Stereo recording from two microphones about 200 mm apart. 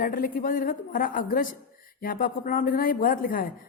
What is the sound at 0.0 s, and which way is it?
A woman's voice, 45° left (ahead or behind).